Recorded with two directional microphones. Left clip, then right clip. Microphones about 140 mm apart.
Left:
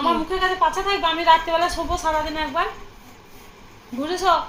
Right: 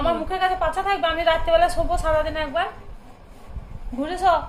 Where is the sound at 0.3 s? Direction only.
25° left (ahead or behind).